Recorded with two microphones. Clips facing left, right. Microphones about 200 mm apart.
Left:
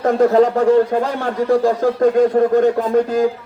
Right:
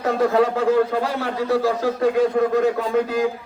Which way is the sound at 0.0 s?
50° left (ahead or behind).